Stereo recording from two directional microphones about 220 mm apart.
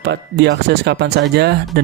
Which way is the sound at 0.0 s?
50° right (ahead or behind).